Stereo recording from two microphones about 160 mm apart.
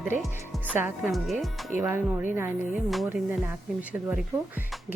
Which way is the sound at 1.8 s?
15° right (ahead or behind).